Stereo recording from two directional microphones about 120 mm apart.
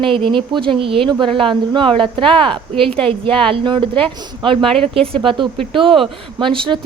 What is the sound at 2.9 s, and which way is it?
Speech, 10° left (ahead or behind).